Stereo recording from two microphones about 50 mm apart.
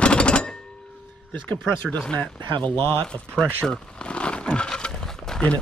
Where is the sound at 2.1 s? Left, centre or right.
Left.